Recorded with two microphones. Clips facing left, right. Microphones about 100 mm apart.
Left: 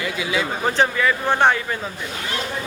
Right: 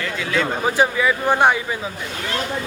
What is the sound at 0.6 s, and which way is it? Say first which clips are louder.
Speech: even; 10° right (ahead or behind).